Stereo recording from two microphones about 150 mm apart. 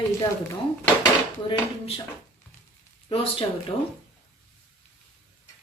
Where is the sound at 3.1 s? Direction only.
40° left (ahead or behind).